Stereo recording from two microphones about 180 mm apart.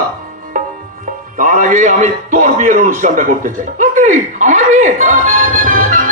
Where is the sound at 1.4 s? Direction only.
45° right (ahead or behind).